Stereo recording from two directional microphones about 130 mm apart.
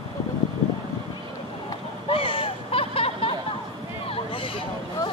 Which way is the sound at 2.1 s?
45° left (ahead or behind).